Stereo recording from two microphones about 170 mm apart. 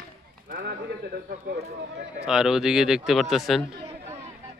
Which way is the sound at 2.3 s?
5° right (ahead or behind).